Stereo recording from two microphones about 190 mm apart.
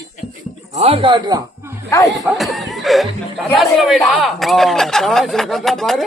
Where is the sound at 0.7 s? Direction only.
30° right (ahead or behind).